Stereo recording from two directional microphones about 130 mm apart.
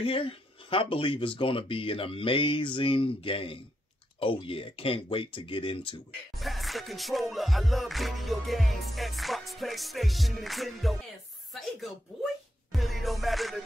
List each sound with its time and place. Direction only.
0.0 s speech: 45° left (ahead or behind)
6.3 s music: centre (ahead or behind)
12.7 s music: centre (ahead or behind)